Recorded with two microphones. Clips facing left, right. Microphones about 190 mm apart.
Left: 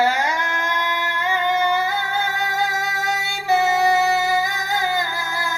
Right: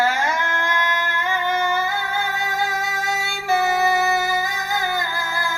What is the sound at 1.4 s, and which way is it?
Music, 15° left (ahead or behind).